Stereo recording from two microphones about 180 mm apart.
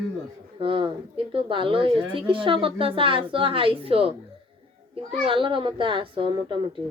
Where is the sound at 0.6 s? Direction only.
30° right (ahead or behind).